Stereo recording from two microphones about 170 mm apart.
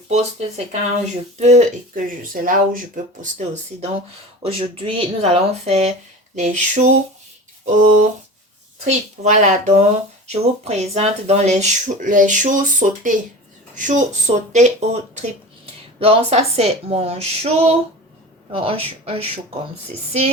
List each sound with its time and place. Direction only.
0.1 s speech: 40° right (ahead or behind)
4.4 s speech: 30° right (ahead or behind)
7.6 s a sound: 45° right (ahead or behind)
8.8 s speech: 45° right (ahead or behind)